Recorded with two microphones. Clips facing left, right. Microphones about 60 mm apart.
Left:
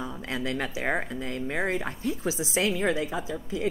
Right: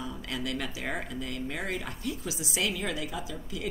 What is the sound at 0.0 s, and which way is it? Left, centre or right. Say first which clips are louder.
Speech: left 3 dB; left.